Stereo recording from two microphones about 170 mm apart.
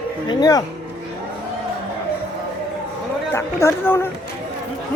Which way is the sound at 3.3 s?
15° left (ahead or behind).